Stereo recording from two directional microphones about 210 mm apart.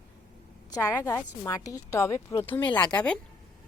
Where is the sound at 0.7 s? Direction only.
15° left (ahead or behind).